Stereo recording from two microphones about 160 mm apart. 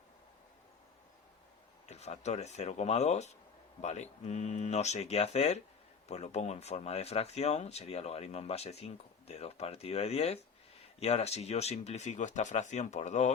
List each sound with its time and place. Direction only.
1.9 s speech: 45° left (ahead or behind)